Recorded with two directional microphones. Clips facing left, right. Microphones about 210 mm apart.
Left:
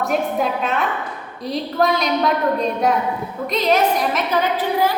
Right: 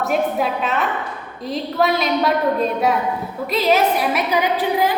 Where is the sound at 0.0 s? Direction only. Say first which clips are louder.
Right 1 dB; centre (ahead or behind).